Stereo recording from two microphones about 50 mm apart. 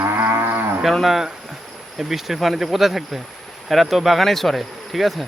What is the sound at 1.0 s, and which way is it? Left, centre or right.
Speech, centre.